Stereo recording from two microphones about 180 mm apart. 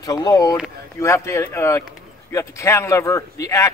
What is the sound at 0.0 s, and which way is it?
Speech, 20° left (ahead or behind).